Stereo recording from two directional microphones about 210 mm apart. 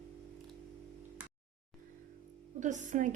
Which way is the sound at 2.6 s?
35° right (ahead or behind).